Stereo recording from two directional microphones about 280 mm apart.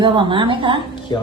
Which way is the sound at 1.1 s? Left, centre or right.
Centre.